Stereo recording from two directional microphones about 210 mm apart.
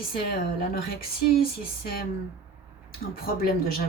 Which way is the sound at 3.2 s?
45° left (ahead or behind).